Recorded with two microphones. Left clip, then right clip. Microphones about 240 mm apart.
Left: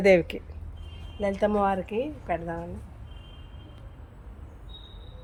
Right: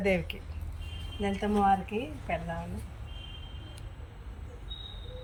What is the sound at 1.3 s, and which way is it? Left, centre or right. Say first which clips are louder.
Speech: left 1 dB; left.